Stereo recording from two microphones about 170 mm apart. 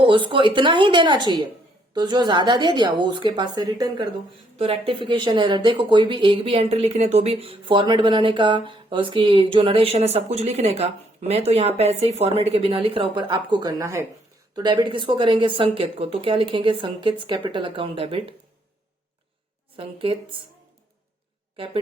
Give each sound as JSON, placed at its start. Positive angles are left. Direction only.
{"t": 0.0, "sound": "a woman's voice", "side_deg": -30}
{"t": 4.5, "sound": "a woman's voice", "side_deg": -35}
{"t": 19.7, "sound": "speech", "side_deg": -35}